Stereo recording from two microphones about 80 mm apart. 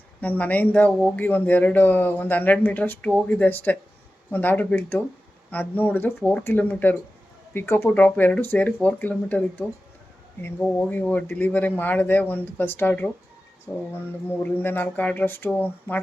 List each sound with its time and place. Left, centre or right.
0.2 s speech: centre
7.9 s speech: centre
10.8 s speech: centre